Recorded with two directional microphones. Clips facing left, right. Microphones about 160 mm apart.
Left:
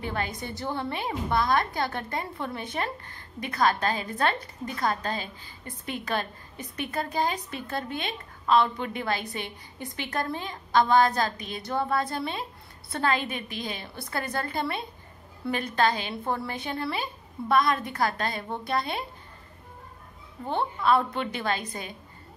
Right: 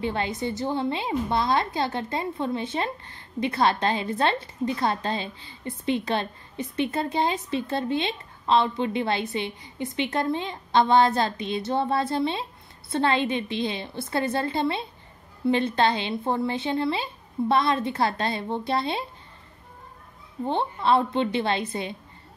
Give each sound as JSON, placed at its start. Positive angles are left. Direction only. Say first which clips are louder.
{"t": 0.0, "sound": "a woman's voice", "louder": "right 5 dB", "side_deg": -25}
{"t": 20.4, "sound": "a woman's voice", "louder": "right 2 dB", "side_deg": -25}